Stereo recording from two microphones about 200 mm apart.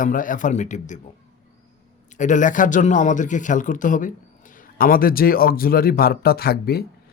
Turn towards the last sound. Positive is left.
turn(degrees=50)  # may be behind; listen again after turning